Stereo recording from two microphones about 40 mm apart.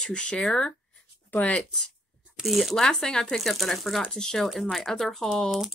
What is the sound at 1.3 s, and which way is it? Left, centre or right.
Speech, left.